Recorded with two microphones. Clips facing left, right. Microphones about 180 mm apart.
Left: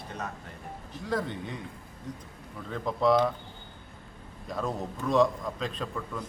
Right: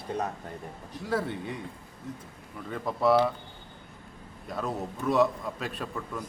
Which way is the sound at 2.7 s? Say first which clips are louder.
Even; 5° right (ahead or behind).